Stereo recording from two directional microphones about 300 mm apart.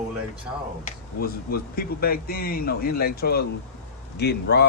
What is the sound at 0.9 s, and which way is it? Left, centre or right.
Speech, left.